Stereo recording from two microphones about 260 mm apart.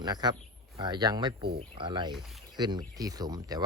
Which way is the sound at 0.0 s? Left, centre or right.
Centre.